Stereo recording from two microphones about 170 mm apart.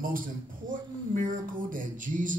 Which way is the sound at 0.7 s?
50° right (ahead or behind).